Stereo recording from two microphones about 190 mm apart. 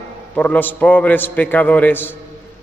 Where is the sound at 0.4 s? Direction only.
10° left (ahead or behind).